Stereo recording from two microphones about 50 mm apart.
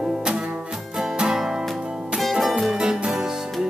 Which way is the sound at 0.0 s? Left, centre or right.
Centre.